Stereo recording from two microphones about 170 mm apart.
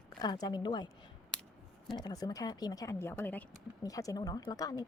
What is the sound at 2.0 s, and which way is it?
A woman's voice, 25° left (ahead or behind).